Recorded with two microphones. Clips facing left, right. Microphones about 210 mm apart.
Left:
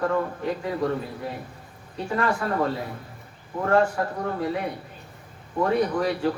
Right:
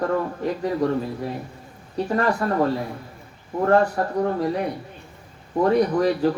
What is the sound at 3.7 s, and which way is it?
Speech, 40° right (ahead or behind).